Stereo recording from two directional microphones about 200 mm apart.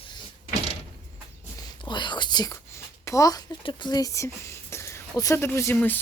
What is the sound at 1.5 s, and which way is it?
Whispering, 25° left (ahead or behind).